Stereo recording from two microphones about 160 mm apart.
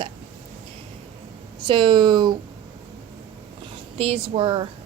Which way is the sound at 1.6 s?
30° right (ahead or behind).